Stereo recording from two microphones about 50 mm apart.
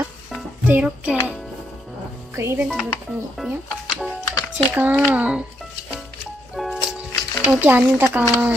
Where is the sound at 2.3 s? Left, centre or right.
Right.